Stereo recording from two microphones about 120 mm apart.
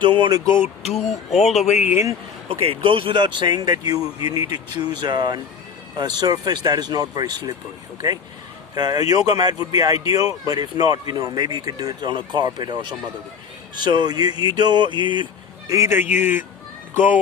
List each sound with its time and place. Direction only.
0.0 s speech: 40° right (ahead or behind)
1.0 s speech: centre (ahead or behind)
1.4 s speech: 65° left (ahead or behind)
2.5 s speech: 50° right (ahead or behind)
8.7 s speech: 30° right (ahead or behind)
15.7 s a man's voice: 20° right (ahead or behind)